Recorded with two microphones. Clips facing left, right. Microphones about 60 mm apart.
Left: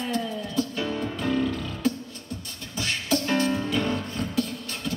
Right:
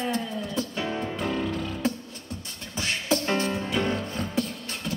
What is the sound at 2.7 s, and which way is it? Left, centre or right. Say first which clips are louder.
Music: even; right.